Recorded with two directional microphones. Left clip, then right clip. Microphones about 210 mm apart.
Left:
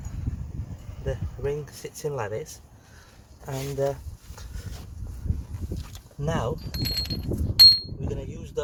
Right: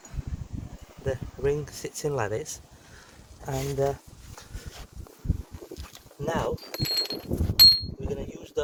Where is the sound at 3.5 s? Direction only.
Centre (ahead or behind).